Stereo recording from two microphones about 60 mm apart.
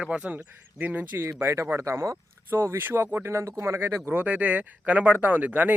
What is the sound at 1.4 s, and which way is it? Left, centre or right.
Speech, right.